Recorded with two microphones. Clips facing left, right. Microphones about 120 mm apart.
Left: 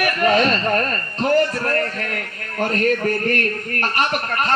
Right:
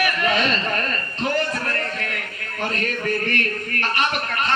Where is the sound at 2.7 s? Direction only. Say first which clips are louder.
Left 6 dB; 40° left (ahead or behind).